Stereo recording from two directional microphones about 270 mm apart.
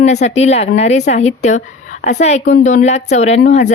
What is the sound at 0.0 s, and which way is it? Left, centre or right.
Speech, left.